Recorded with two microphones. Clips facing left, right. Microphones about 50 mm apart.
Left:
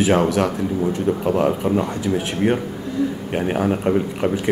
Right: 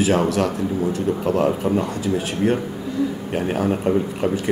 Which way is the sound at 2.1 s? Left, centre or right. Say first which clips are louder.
Left 1 dB; left.